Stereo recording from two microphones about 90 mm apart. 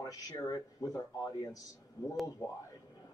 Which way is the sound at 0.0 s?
40° left (ahead or behind).